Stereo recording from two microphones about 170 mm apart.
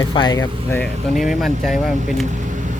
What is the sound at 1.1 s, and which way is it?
Speech, centre (ahead or behind).